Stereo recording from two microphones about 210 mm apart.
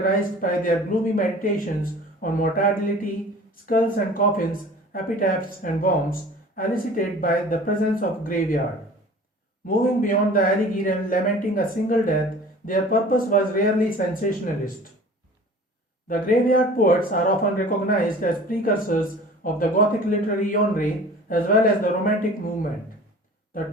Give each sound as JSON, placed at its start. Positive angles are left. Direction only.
{"t": 0.0, "sound": "speech", "side_deg": 40}
{"t": 9.6, "sound": "speech", "side_deg": 40}
{"t": 16.0, "sound": "speech", "side_deg": 40}